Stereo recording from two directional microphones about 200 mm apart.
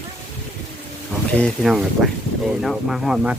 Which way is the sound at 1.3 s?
Centre (ahead or behind).